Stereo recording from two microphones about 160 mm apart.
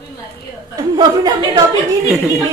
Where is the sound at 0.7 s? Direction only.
25° right (ahead or behind).